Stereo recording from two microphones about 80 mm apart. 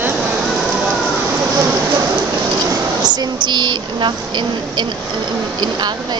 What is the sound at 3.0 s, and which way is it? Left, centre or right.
A woman's voice, right.